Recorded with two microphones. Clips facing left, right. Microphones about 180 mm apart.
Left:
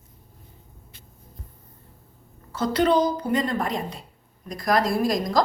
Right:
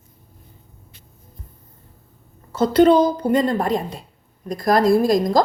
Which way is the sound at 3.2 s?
30° right (ahead or behind).